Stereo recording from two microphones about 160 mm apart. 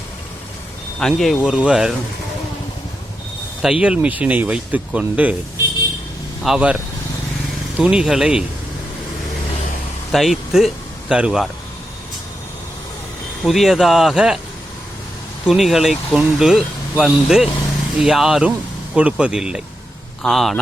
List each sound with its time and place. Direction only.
0.9 s speech: centre (ahead or behind)
3.6 s speech: 5° right (ahead or behind)
6.4 s speech: 5° right (ahead or behind)
7.8 s speech: 5° right (ahead or behind)
10.1 s speech: centre (ahead or behind)
13.4 s speech: centre (ahead or behind)
15.4 s speech: centre (ahead or behind)